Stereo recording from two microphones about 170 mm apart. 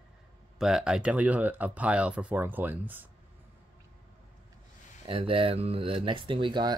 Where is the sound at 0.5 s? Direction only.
5° right (ahead or behind).